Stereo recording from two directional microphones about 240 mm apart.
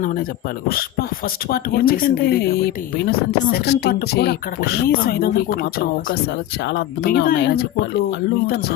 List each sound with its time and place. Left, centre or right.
0.7 s speech: left